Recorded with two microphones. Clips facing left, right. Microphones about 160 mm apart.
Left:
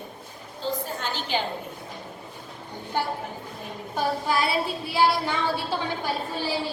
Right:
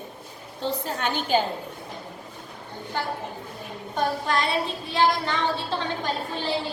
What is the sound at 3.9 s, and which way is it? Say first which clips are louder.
A woman's voice: even; 5° left (ahead or behind).